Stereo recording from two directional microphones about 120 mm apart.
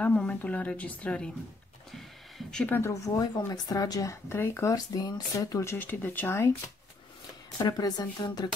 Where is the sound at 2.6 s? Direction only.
20° left (ahead or behind).